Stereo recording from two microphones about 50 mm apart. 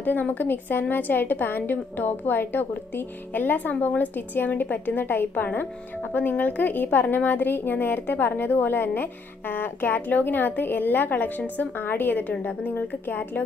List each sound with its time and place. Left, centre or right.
0.0 s a woman's voice: left